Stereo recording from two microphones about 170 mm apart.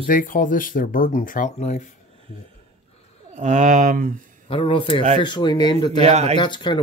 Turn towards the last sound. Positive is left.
turn(degrees=25)  # may be behind; listen again after turning